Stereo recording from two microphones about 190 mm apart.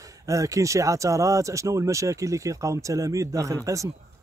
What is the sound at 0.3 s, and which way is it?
Speech, 15° right (ahead or behind).